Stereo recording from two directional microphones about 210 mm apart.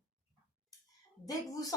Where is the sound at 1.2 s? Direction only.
15° left (ahead or behind).